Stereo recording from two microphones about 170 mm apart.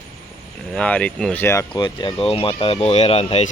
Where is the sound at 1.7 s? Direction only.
25° left (ahead or behind).